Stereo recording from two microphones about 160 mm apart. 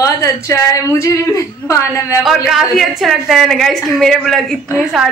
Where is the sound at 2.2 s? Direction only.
Centre (ahead or behind).